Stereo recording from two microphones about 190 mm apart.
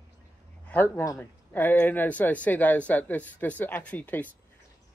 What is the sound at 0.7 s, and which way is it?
Speech, 10° left (ahead or behind).